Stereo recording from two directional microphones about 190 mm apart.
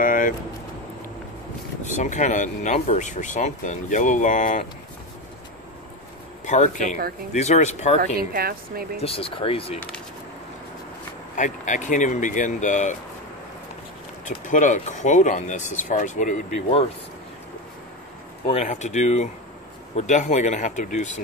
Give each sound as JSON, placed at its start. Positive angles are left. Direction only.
{"t": 0.0, "sound": "vehicle", "side_deg": 45}
{"t": 1.8, "sound": "speech", "side_deg": 40}
{"t": 6.4, "sound": "speech", "side_deg": 40}
{"t": 8.2, "sound": "speech", "side_deg": -55}
{"t": 9.0, "sound": "speech", "side_deg": 30}
{"t": 11.3, "sound": "speech", "side_deg": 40}
{"t": 14.2, "sound": "speech", "side_deg": 40}
{"t": 18.4, "sound": "speech", "side_deg": 35}